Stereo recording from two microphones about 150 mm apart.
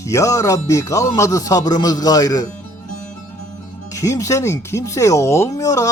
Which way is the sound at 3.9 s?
20° left (ahead or behind).